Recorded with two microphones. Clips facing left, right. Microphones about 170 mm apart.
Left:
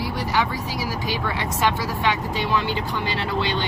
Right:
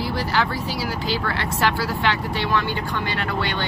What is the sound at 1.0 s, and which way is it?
Speech, 15° left (ahead or behind).